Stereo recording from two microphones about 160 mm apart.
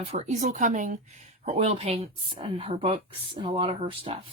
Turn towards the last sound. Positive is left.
turn(degrees=-35)  # may be behind; listen again after turning